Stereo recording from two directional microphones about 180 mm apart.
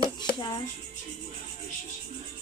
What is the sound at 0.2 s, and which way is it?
Music, 25° left (ahead or behind).